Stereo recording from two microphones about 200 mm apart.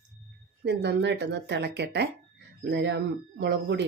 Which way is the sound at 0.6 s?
60° right (ahead or behind).